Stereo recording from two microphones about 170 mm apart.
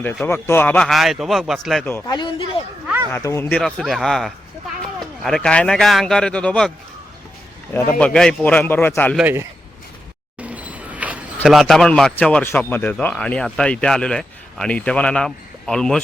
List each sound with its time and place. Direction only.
0.0 s speech: 10° left (ahead or behind)
2.0 s speech: 25° left (ahead or behind)
3.1 s speech: 15° left (ahead or behind)
3.6 s speech: centre (ahead or behind)
7.7 s speech: 10° left (ahead or behind)
9.1 s speech: 10° right (ahead or behind)
10.4 s a sound: 10° right (ahead or behind)
11.4 s speech: centre (ahead or behind)